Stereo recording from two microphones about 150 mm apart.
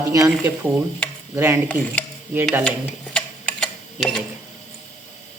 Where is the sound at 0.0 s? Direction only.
20° right (ahead or behind).